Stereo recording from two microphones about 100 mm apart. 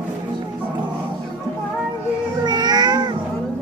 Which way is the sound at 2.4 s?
45° right (ahead or behind).